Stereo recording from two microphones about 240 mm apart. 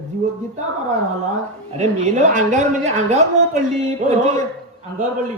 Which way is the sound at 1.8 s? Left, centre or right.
Right.